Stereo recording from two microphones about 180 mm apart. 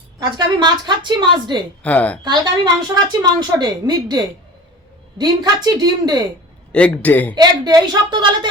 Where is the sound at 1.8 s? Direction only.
10° left (ahead or behind).